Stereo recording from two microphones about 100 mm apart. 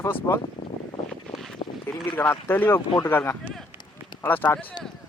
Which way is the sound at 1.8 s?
20° left (ahead or behind).